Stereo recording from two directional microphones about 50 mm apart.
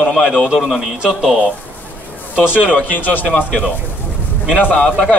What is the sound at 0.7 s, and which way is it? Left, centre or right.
Speech, centre.